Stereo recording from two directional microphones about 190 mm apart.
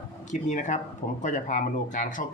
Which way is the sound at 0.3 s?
40° left (ahead or behind).